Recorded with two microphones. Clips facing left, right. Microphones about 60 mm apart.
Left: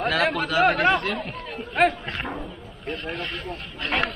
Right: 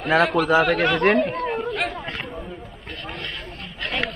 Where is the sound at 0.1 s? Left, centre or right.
Right.